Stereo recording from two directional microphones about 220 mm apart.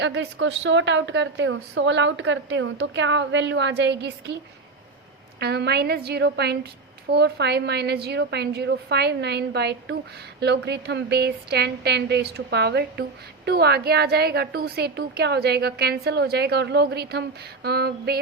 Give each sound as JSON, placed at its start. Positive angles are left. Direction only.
{"t": 0.0, "sound": "a woman's voice", "side_deg": -55}
{"t": 5.4, "sound": "speech", "side_deg": -50}